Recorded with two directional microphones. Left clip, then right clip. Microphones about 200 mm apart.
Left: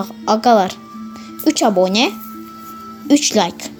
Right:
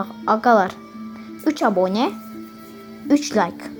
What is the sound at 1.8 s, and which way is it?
Speech, 20° left (ahead or behind).